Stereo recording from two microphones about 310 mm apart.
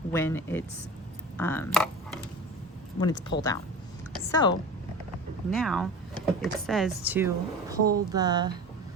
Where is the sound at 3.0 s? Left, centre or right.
Centre.